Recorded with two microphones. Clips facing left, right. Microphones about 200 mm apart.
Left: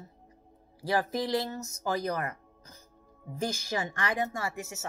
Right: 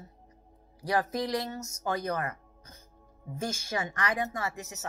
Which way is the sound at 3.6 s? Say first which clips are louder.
Even; 30° left (ahead or behind).